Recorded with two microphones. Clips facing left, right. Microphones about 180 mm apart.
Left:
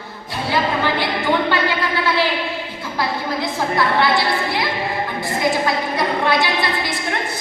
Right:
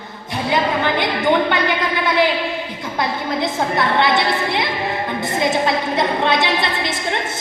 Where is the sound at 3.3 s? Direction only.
20° right (ahead or behind).